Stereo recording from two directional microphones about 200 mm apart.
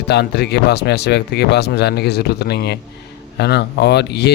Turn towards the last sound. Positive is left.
turn(degrees=55)  # may be behind; listen again after turning